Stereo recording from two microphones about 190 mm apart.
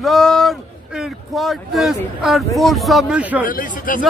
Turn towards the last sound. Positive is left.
turn(degrees=45)  # may be behind; listen again after turning